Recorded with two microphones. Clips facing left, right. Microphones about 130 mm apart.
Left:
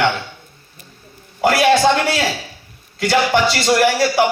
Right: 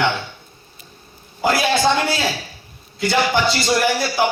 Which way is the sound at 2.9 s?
75° left (ahead or behind).